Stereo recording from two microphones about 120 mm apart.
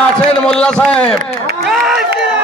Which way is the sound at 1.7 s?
5° right (ahead or behind).